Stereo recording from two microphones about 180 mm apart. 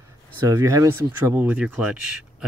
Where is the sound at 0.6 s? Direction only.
15° right (ahead or behind).